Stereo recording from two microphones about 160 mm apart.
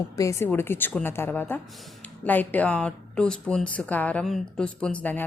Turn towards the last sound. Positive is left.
turn(degrees=10)  # may be behind; listen again after turning